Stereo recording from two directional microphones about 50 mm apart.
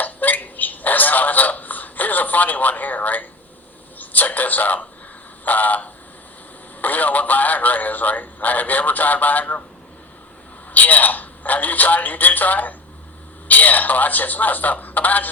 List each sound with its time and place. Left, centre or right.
0.0 s a sound: left
3.9 s speech: left
10.7 s speech: left